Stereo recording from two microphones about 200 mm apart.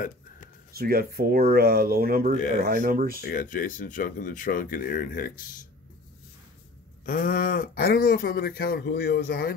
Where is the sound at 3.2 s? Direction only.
45° left (ahead or behind).